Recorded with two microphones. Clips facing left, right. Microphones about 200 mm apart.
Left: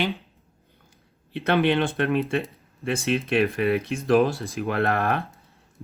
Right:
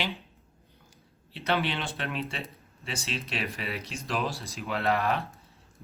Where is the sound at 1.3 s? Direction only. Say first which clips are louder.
Left 8 dB; 55° left (ahead or behind).